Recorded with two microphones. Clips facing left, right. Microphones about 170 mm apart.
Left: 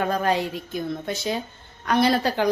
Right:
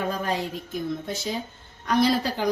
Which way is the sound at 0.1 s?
70° left (ahead or behind).